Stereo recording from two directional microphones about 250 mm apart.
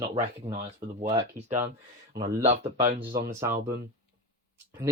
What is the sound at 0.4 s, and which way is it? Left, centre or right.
Speech, right.